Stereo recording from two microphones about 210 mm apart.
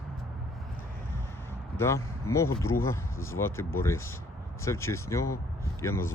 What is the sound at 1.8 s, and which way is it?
Speech, 15° left (ahead or behind).